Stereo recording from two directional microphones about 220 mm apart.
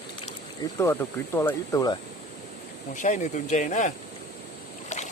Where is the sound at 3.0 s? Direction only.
35° left (ahead or behind).